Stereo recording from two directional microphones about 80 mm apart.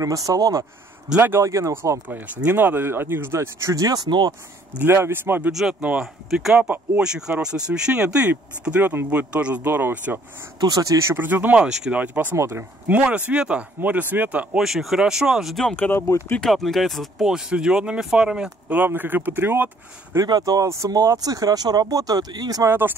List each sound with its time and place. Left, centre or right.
0.0 s speech: right
2.0 s speech: right
4.7 s speech: right
5.5 s speech: centre; by 10.2 s right
10.6 s speech: right
11.1 s speech: right
12.4 s speech: right
12.8 s speech: centre
14.6 s speech: centre
15.7 s speech: centre
16.3 s speech: centre
18.7 s speech: right
20.2 s speech: right
22.7 s speech: right